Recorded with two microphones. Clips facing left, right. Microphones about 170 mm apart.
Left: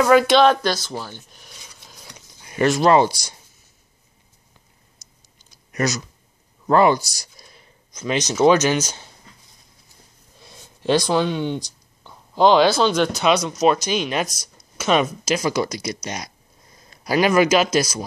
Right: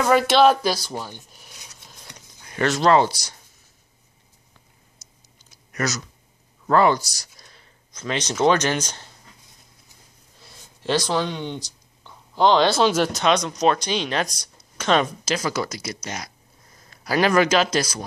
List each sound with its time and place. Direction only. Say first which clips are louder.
0.0 s speech: left 2 dB; centre (ahead or behind)
1.3 s a sound: left 1 dB; centre (ahead or behind)
2.4 s speech: left 3 dB; 15° left (ahead or behind)
5.0 s a sound: even; 15° left (ahead or behind)
5.7 s speech: left 4 dB; 15° left (ahead or behind)
10.4 s speech: left 5 dB; 15° left (ahead or behind)